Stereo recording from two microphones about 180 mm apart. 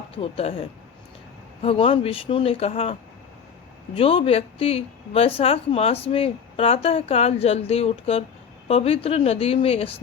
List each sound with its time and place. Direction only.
0.2 s a woman's voice: 35° left (ahead or behind)
1.6 s a woman's voice: 30° left (ahead or behind)